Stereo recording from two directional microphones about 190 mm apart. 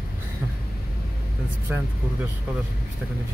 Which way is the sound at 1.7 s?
10° right (ahead or behind).